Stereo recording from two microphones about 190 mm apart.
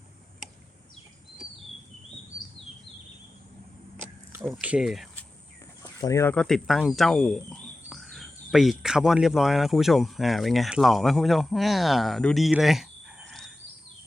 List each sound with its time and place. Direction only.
4.4 s speech: centre (ahead or behind)
5.8 s a sound: 20° left (ahead or behind)
6.3 s speech: 5° left (ahead or behind)